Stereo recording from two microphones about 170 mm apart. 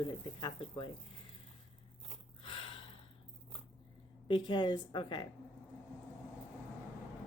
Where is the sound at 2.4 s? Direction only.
30° left (ahead or behind).